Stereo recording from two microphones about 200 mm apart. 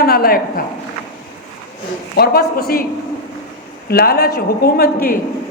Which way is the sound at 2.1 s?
50° left (ahead or behind).